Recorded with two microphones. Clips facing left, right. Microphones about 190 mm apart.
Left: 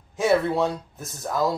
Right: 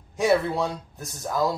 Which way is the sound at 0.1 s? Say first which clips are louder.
Left 1 dB; centre (ahead or behind).